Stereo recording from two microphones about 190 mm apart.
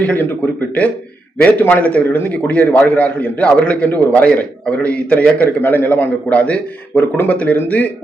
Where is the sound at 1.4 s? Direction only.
10° left (ahead or behind).